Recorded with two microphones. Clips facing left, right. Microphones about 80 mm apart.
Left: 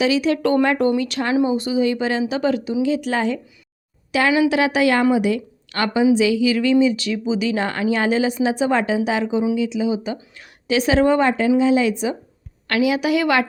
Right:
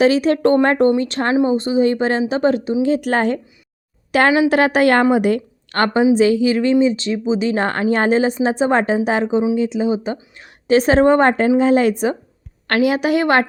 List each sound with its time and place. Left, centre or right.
0.0 s a woman's voice: right
10.2 s a woman's voice: right
10.7 s a woman's voice: right